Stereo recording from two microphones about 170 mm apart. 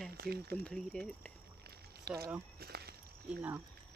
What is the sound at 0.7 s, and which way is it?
Speech, 5° left (ahead or behind).